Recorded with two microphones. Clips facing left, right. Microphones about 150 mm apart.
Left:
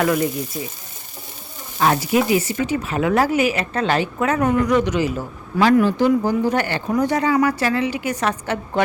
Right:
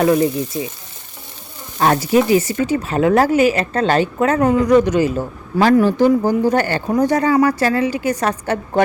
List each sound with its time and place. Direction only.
0.0 s frying: 25° right (ahead or behind)
1.8 s a woman's voice: 40° right (ahead or behind)
4.7 s a man's voice: 45° right (ahead or behind)